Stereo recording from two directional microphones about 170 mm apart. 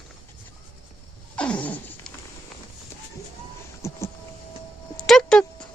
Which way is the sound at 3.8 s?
15° left (ahead or behind).